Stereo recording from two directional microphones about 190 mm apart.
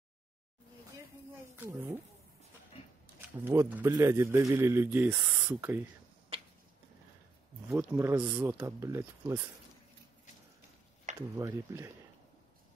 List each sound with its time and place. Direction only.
1.6 s speech: 15° right (ahead or behind)
3.2 s speech: 10° right (ahead or behind)
7.7 s speech: 15° right (ahead or behind)
11.3 s speech: 15° right (ahead or behind)